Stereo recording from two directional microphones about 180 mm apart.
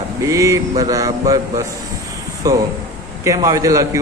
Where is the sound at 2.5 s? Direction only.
20° right (ahead or behind).